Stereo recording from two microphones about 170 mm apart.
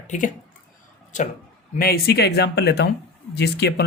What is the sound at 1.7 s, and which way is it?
Speech, 60° left (ahead or behind).